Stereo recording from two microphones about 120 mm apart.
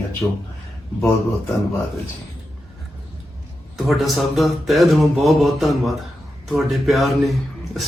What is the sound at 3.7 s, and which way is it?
Speech, centre (ahead or behind).